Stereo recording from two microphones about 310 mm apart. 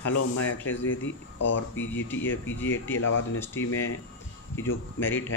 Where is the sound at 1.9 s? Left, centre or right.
Centre.